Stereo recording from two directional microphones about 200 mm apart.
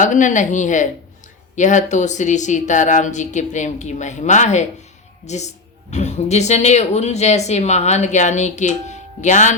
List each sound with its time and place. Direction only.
0.0 s speech: 40° left (ahead or behind)